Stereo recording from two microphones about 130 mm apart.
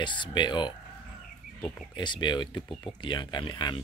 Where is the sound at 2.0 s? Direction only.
35° left (ahead or behind).